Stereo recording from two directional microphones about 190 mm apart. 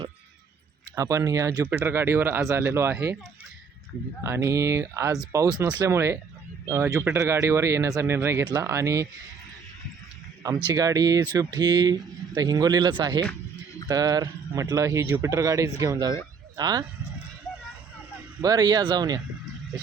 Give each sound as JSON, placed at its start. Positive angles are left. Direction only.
{"t": 0.9, "sound": "speech", "side_deg": -15}
{"t": 4.2, "sound": "speech", "side_deg": -15}
{"t": 10.7, "sound": "speech", "side_deg": -20}
{"t": 18.4, "sound": "speech", "side_deg": -20}